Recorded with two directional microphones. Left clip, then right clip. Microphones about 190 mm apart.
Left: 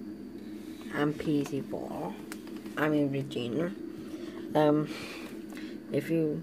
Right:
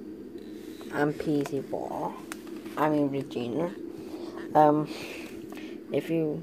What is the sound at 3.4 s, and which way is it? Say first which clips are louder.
Speech: right 2 dB; 40° right (ahead or behind).